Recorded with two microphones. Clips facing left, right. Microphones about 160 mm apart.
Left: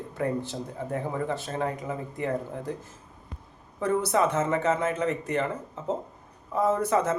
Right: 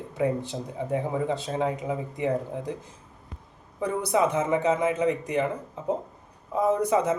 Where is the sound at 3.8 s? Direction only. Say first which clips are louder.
Even; 15° right (ahead or behind).